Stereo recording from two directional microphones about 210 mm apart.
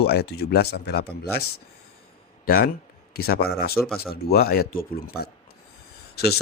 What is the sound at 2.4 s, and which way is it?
Speech, 45° left (ahead or behind).